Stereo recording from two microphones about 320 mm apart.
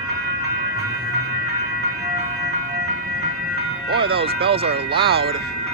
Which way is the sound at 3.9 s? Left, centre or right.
Centre.